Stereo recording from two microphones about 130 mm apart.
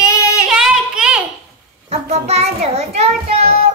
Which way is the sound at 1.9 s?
55° right (ahead or behind).